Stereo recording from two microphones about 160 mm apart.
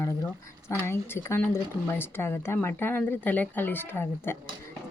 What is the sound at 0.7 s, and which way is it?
A woman's voice, 15° left (ahead or behind).